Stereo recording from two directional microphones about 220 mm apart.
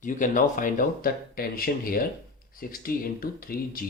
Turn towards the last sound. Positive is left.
turn(degrees=40)  # may be behind; listen again after turning